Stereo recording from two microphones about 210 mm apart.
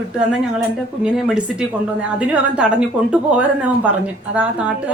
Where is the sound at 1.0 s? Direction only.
5° right (ahead or behind).